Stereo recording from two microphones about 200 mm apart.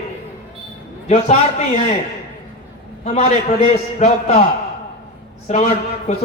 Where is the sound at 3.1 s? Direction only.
35° left (ahead or behind).